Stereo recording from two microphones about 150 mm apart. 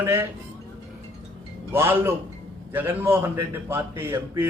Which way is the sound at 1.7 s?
15° right (ahead or behind).